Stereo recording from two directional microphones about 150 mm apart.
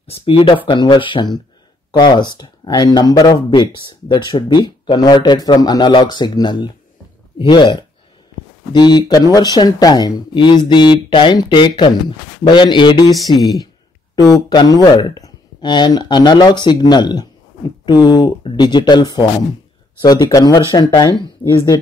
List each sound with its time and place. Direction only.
0.0 s speech: 40° left (ahead or behind)